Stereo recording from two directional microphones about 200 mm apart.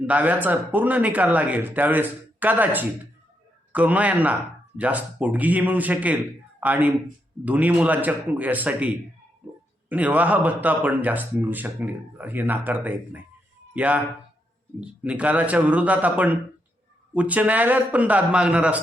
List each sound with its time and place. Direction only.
0.0 s speech: 5° right (ahead or behind)
9.9 s speech: 10° right (ahead or behind)